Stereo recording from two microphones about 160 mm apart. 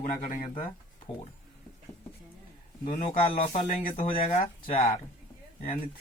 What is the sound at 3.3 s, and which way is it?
Speech, 45° left (ahead or behind).